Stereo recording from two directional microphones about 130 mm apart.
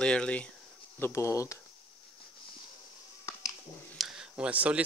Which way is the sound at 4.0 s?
5° right (ahead or behind).